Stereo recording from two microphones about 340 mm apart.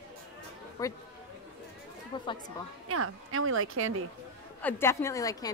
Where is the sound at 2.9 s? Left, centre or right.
Right.